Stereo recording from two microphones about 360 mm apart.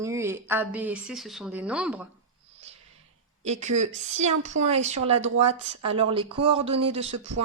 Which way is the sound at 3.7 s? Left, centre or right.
Centre.